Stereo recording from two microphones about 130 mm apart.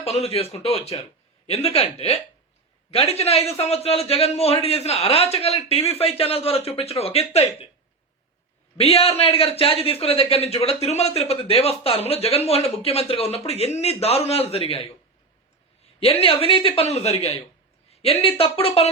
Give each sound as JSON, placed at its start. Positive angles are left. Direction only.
{"t": 0.0, "sound": "a man's voice", "side_deg": 55}
{"t": 8.8, "sound": "a man's voice", "side_deg": 50}
{"t": 16.0, "sound": "a man's voice", "side_deg": 50}